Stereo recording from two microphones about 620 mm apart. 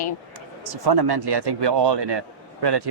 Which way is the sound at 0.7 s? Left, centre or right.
Right.